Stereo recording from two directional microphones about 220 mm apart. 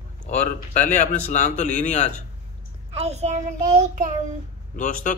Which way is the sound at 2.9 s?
30° right (ahead or behind).